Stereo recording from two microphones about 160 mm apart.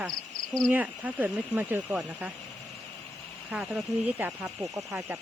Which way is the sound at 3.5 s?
5° right (ahead or behind).